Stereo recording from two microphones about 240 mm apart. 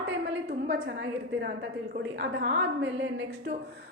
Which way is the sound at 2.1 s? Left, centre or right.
Right.